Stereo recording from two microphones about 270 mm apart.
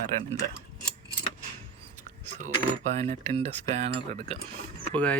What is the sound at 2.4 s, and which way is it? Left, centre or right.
Speech, right.